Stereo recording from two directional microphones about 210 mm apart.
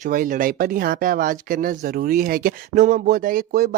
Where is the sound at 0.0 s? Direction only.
40° right (ahead or behind).